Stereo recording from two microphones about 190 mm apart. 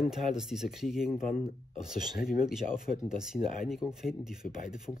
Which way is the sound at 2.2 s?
Centre (ahead or behind).